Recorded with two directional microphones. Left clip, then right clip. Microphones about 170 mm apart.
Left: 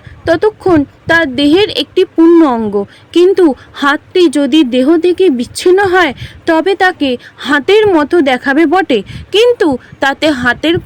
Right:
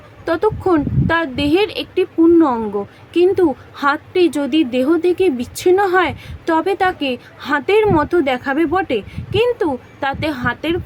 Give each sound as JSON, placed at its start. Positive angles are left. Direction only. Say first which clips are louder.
{"t": 0.3, "sound": "speech", "louder": "left 6 dB", "side_deg": 35}